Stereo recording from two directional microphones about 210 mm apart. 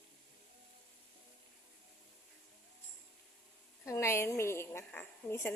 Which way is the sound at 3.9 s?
15° left (ahead or behind).